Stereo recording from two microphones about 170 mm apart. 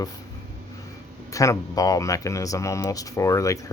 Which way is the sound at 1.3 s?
20° left (ahead or behind).